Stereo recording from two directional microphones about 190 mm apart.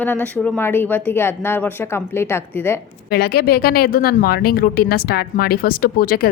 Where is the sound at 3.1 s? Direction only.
55° left (ahead or behind).